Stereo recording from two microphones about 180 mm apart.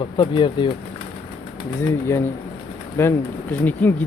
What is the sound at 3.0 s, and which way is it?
Speech, 15° left (ahead or behind).